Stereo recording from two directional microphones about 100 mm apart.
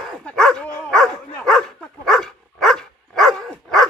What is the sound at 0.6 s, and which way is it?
Dog, 15° left (ahead or behind).